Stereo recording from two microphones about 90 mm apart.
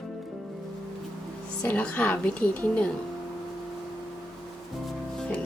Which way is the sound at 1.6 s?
20° left (ahead or behind).